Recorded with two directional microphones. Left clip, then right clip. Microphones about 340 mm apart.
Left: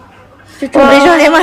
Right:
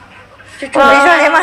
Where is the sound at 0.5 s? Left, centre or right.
Left.